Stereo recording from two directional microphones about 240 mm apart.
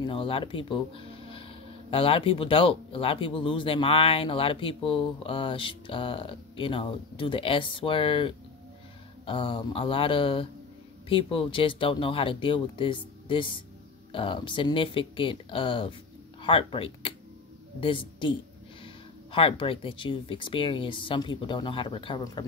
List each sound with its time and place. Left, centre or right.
0.0 s speech: left
19.3 s speech: left